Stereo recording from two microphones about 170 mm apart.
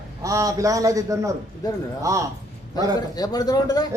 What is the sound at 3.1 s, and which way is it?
Speech, 20° left (ahead or behind).